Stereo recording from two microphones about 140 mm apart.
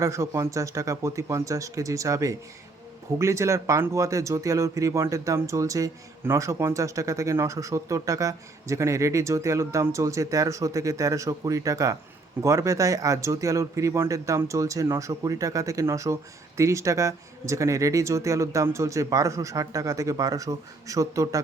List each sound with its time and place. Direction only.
0.0 s speech: 20° right (ahead or behind)